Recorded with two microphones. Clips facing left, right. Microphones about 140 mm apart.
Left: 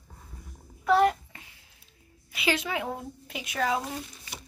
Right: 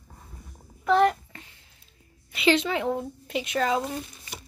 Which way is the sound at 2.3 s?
5° left (ahead or behind).